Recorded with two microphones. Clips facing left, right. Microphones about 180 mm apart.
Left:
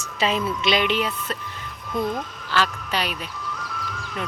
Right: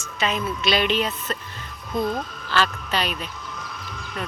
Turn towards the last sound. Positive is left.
turn(degrees=10)  # may be behind; listen again after turning